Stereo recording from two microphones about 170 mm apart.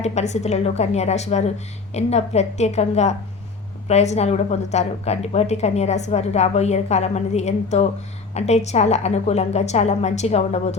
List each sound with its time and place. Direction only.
0.0 s a woman's voice: 40° left (ahead or behind)